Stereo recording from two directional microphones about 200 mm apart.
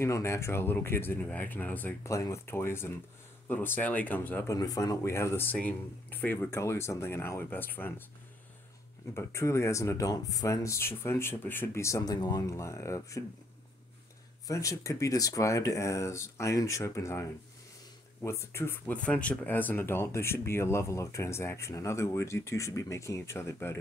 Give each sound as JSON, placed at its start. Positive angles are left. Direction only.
{"t": 0.0, "sound": "speech", "side_deg": 15}
{"t": 9.1, "sound": "speech", "side_deg": 15}
{"t": 14.5, "sound": "speech", "side_deg": 15}